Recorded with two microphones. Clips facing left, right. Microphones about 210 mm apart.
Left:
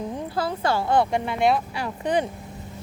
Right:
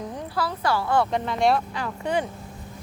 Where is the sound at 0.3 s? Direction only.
25° left (ahead or behind); by 1.6 s 5° left (ahead or behind).